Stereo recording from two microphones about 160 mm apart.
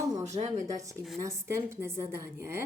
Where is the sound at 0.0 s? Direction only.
25° right (ahead or behind).